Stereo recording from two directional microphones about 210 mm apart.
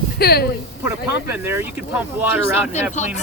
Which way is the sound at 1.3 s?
10° right (ahead or behind).